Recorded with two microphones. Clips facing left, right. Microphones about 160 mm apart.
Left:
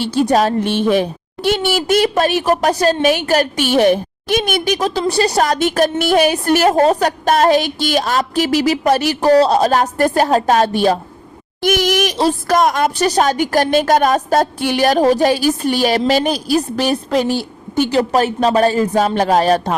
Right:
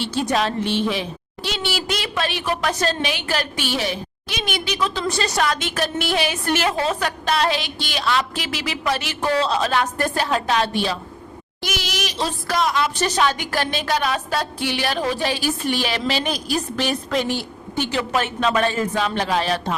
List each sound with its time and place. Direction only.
0.0 s a woman's voice: 40° left (ahead or behind)